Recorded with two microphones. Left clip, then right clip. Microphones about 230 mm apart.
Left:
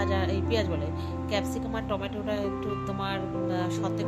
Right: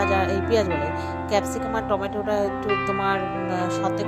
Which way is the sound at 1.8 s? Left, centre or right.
Right.